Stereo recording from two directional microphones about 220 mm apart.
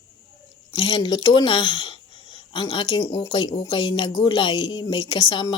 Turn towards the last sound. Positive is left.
turn(degrees=20)  # may be behind; listen again after turning